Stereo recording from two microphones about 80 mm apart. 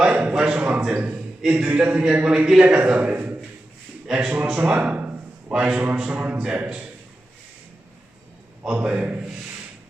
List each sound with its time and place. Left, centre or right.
0.1 s a sound: centre
0.4 s a man's voice: centre
4.0 s a man's voice: centre
8.6 s a man's voice: centre